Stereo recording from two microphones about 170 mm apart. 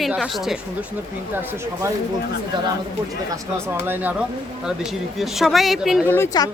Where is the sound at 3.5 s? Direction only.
15° right (ahead or behind).